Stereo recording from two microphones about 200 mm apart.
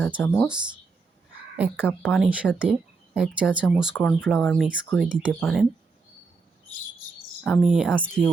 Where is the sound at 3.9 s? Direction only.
10° left (ahead or behind).